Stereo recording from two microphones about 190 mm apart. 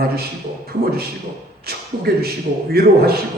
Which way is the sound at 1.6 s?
55° right (ahead or behind).